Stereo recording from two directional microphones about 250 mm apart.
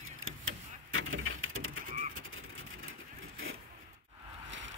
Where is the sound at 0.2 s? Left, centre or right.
Right.